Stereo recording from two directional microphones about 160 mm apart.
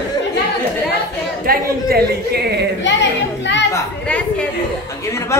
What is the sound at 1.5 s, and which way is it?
A man's voice, 70° right (ahead or behind).